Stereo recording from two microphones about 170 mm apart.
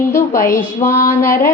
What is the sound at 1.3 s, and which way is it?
Speech, 55° left (ahead or behind).